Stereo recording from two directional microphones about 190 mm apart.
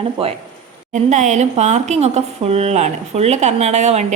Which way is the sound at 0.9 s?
40° right (ahead or behind).